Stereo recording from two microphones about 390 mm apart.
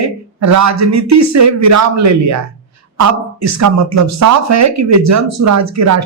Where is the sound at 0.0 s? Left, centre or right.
Right.